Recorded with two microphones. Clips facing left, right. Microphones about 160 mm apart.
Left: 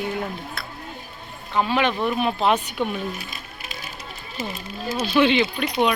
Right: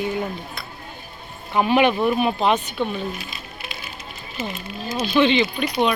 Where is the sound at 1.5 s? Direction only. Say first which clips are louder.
Right 4 dB; 15° right (ahead or behind).